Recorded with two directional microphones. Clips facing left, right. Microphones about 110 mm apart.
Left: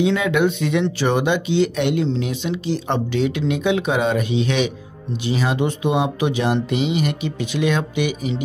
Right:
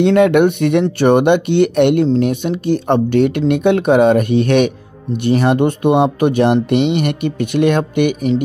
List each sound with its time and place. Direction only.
0.0 s speech: 60° right (ahead or behind)
2.0 s speech: 50° right (ahead or behind)